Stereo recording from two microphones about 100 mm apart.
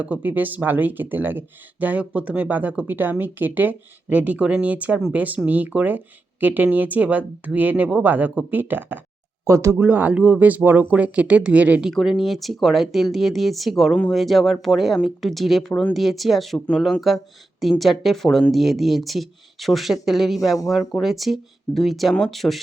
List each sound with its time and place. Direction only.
0.0 s speech: 15° right (ahead or behind)
9.4 s speech: 30° right (ahead or behind)
9.7 s speech: 20° right (ahead or behind)
11.9 s speech: centre (ahead or behind)